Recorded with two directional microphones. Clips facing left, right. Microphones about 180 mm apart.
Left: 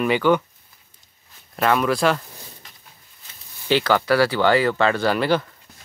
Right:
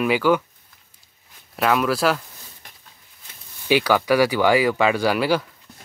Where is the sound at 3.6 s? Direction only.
10° right (ahead or behind).